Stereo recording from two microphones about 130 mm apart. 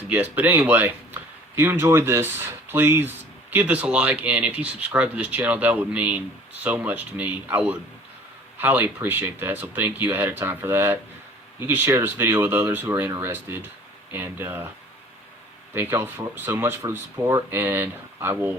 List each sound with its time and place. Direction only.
0.1 s speech: 15° right (ahead or behind)
15.7 s speech: 15° right (ahead or behind)